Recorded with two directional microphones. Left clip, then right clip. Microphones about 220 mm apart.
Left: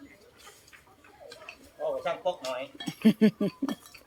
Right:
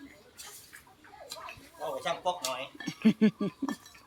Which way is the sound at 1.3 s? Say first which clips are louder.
Right 7 dB; 50° right (ahead or behind).